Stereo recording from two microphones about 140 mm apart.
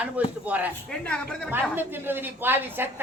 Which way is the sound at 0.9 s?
5° left (ahead or behind).